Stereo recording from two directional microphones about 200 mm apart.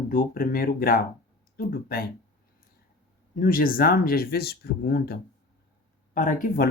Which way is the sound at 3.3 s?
45° left (ahead or behind).